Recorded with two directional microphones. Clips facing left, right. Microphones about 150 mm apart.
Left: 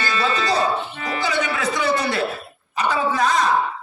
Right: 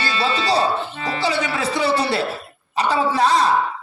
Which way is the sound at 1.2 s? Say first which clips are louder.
Right 1 dB; 30° right (ahead or behind).